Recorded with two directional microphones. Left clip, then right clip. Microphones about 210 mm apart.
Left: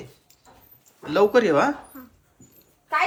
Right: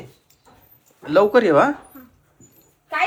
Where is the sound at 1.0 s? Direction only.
15° left (ahead or behind).